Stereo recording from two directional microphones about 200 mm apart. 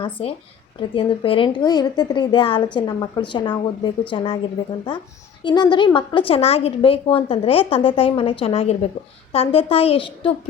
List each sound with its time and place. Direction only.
0.0 s a woman's voice: 25° left (ahead or behind)
5.4 s a woman's voice: 20° left (ahead or behind)